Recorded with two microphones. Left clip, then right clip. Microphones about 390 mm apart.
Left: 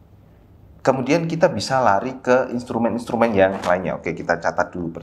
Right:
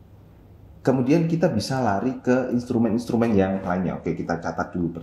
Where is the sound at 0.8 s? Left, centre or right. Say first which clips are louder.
Left 3 dB; left.